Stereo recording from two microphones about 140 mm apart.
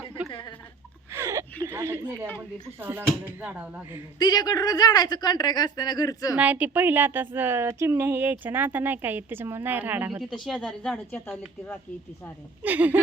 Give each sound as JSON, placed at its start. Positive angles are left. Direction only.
{"t": 1.1, "sound": "a sound", "side_deg": -20}
{"t": 1.6, "sound": "a woman's voice", "side_deg": -15}
{"t": 4.2, "sound": "speech", "side_deg": 30}
{"t": 6.3, "sound": "a woman's voice", "side_deg": -10}
{"t": 10.4, "sound": "speech", "side_deg": 0}
{"t": 12.6, "sound": "a woman's voice", "side_deg": -10}